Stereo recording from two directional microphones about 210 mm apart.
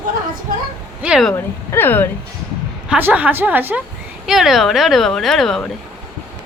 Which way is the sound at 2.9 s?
10° right (ahead or behind).